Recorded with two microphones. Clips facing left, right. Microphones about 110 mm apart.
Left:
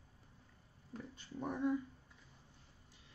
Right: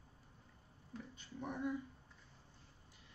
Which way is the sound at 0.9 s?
40° left (ahead or behind).